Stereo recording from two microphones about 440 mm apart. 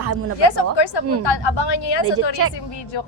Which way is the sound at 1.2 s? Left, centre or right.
Left.